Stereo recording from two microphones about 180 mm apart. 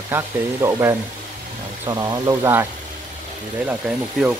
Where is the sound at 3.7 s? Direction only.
5° right (ahead or behind).